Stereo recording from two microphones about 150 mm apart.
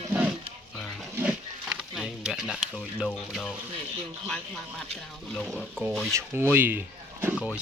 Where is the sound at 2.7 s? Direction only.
5° left (ahead or behind).